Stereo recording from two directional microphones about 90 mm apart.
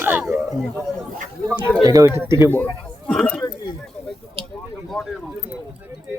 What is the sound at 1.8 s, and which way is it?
Speech, 40° right (ahead or behind).